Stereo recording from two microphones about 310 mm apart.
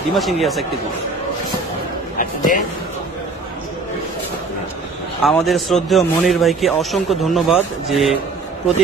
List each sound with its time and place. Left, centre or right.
0.1 s a man's voice: centre
2.1 s a sound: left
5.2 s a man's voice: centre